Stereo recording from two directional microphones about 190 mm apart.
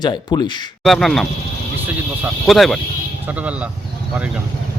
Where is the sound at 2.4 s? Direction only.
Centre (ahead or behind).